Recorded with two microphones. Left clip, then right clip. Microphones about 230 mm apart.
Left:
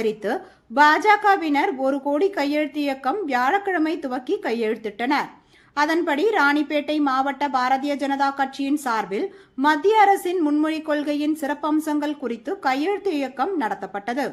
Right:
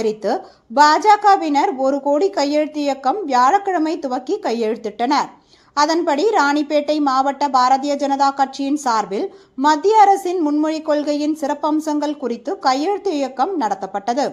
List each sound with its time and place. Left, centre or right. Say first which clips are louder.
0.8 s a woman's voice: right 4 dB; centre